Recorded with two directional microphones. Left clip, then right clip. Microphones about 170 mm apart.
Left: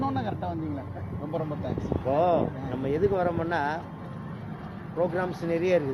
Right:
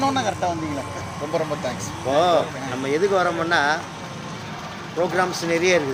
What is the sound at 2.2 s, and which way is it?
Speech, 20° right (ahead or behind).